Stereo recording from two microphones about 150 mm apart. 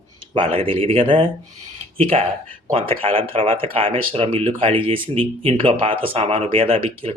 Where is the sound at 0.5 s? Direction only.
40° right (ahead or behind).